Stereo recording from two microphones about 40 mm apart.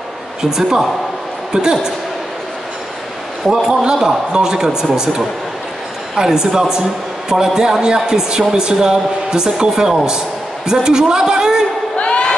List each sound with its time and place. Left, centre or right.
0.4 s a woman's voice: centre
3.6 s a woman's voice: centre
12.0 s crowd: left